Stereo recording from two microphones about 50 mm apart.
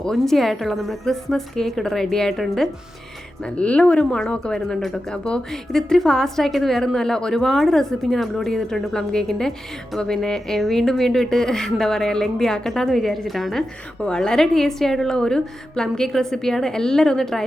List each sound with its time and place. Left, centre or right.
0.0 s a woman's voice: centre
3.6 s a woman's voice: left; by 13.7 s centre
14.0 s a woman's voice: centre